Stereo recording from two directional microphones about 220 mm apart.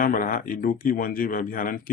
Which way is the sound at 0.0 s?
40° left (ahead or behind).